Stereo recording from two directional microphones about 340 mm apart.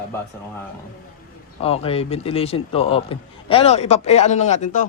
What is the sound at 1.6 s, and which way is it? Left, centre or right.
A man's voice, centre.